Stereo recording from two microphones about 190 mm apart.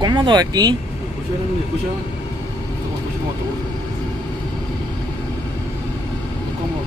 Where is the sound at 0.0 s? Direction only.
20° right (ahead or behind).